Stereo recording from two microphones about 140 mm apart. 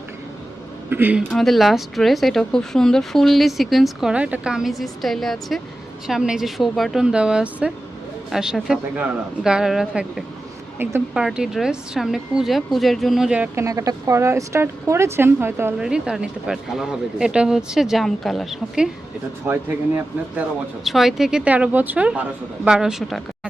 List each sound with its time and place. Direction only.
0.9 s speech: 15° right (ahead or behind)
1.3 s speech: centre (ahead or behind)
13.7 s speech: 25° right (ahead or behind)
15.8 s speech: 5° right (ahead or behind)
20.8 s speech: centre (ahead or behind)